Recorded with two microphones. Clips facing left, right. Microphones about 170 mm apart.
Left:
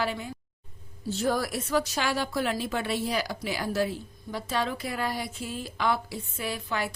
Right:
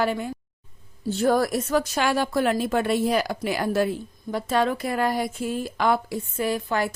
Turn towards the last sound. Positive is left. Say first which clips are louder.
# right 7 dB
turn(degrees=-45)  # may be behind; listen again after turning